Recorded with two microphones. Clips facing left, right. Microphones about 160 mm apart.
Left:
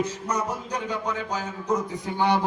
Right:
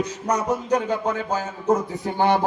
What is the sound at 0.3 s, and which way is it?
Speech, 55° right (ahead or behind).